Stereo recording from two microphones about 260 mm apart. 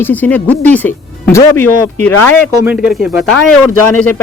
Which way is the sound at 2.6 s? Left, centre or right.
Centre.